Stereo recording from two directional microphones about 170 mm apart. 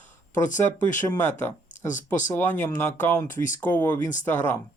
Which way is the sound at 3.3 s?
50° left (ahead or behind).